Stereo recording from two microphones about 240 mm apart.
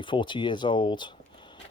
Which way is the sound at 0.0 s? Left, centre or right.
Centre.